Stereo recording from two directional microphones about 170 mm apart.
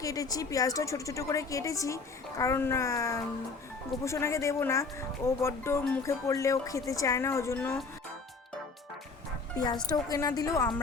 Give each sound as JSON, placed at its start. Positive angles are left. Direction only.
{"t": 0.0, "sound": "a woman's voice", "side_deg": 20}
{"t": 9.6, "sound": "a woman's voice", "side_deg": 25}